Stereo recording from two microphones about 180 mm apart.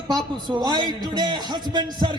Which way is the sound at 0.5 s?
25° right (ahead or behind).